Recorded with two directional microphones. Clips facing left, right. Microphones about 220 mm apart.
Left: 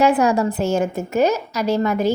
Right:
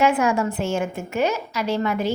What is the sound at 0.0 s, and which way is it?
A woman's voice, 35° left (ahead or behind).